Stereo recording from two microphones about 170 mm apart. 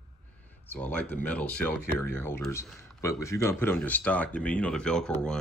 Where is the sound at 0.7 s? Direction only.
10° left (ahead or behind).